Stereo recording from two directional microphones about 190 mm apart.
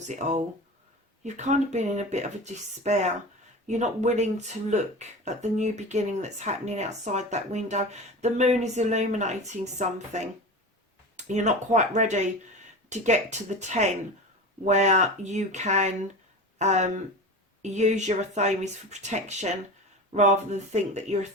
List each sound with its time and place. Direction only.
0.1 s speech: 40° right (ahead or behind)
11.3 s speech: 40° right (ahead or behind)